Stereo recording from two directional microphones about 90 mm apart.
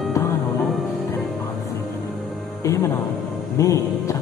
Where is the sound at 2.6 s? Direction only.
40° left (ahead or behind).